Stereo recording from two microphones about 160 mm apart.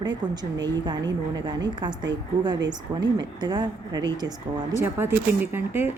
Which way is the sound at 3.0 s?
25° right (ahead or behind).